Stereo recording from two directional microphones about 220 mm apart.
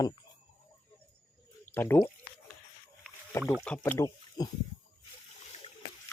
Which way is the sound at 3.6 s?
5° left (ahead or behind).